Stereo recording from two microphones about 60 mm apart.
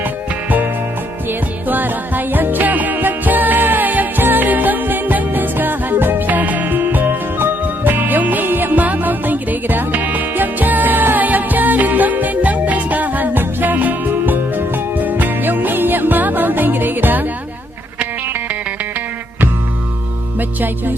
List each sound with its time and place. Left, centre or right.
1.3 s music: right